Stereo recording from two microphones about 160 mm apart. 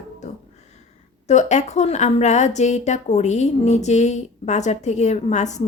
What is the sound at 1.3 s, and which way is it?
A woman's voice, 45° left (ahead or behind).